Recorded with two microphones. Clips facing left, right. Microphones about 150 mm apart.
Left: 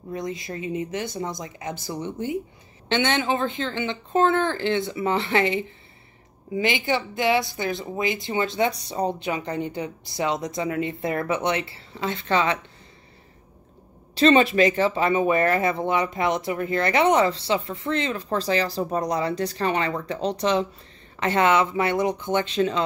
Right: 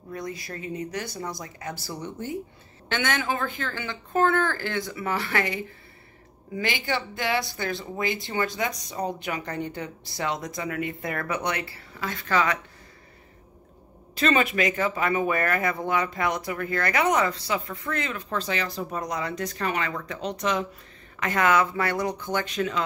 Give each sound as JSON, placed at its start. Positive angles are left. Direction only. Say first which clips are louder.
{"t": 0.1, "sound": "speech", "louder": "left 4 dB", "side_deg": 20}
{"t": 14.1, "sound": "speech", "louder": "left 6 dB", "side_deg": 30}